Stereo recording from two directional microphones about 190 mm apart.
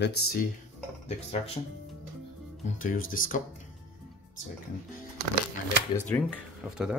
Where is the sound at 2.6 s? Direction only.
45° left (ahead or behind).